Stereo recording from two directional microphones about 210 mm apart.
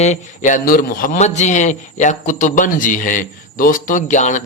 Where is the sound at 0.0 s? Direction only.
35° left (ahead or behind).